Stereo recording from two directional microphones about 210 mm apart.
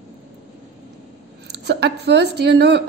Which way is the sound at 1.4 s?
50° right (ahead or behind).